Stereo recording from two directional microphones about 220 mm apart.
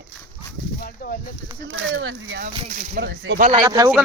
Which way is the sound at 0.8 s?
40° left (ahead or behind).